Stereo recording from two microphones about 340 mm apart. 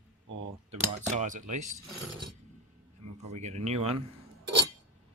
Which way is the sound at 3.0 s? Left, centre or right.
Right.